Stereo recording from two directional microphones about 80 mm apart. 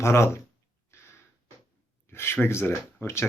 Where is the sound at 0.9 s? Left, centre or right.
Left.